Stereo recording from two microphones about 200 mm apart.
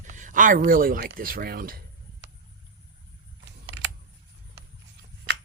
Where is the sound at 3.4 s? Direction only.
65° right (ahead or behind).